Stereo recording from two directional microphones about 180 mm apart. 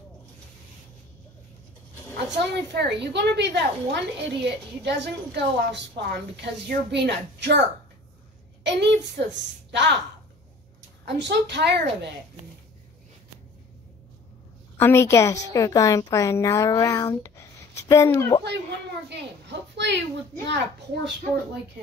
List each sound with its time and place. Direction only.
2.3 s a woman's voice: 70° right (ahead or behind)
8.6 s a woman's voice: 75° right (ahead or behind)
11.1 s a woman's voice: 75° right (ahead or behind)
14.8 s a woman's voice: 15° left (ahead or behind)
19.0 s a child's voice: 70° right (ahead or behind)